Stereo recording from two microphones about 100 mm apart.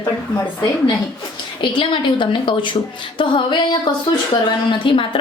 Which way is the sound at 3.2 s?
50° left (ahead or behind).